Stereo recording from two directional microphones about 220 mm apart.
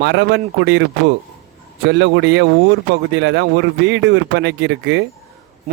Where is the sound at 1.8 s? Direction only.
55° right (ahead or behind).